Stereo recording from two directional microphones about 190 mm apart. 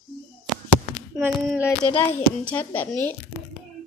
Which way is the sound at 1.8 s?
25° left (ahead or behind).